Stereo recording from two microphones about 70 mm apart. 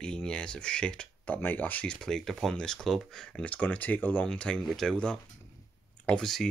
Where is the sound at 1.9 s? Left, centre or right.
Centre.